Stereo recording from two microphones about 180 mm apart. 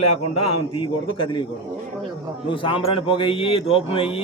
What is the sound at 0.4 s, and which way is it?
Speech, 30° left (ahead or behind).